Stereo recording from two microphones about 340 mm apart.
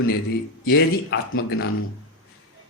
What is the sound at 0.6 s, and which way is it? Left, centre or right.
Speech, left.